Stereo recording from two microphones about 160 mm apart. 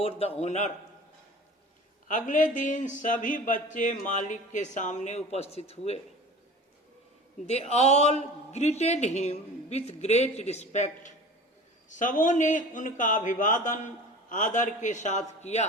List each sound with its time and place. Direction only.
0.0 s a man's voice: 40° left (ahead or behind)
2.0 s speech: 55° left (ahead or behind)
7.4 s speech: 40° left (ahead or behind)